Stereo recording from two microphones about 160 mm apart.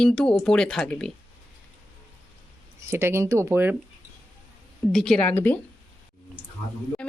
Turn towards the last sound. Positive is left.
turn(degrees=5)  # may be behind; listen again after turning